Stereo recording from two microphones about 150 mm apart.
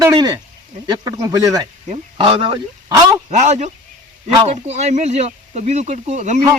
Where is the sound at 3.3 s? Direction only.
50° right (ahead or behind).